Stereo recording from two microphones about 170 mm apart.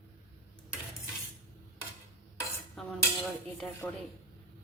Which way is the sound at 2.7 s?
Centre (ahead or behind).